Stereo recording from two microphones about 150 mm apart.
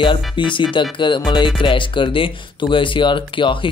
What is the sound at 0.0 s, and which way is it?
Speech, 30° left (ahead or behind).